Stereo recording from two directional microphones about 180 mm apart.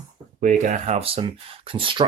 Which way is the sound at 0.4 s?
45° right (ahead or behind).